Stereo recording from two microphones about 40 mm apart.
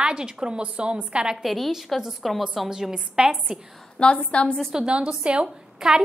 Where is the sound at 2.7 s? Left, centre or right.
Centre.